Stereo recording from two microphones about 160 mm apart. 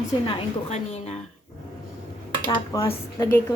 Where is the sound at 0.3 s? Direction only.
40° left (ahead or behind).